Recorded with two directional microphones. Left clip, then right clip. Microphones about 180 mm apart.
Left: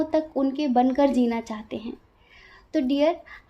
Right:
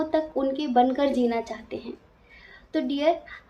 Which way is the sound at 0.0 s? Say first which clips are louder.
Left 1 dB; 50° left (ahead or behind).